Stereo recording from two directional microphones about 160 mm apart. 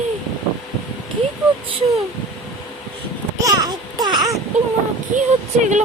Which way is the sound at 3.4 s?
25° right (ahead or behind).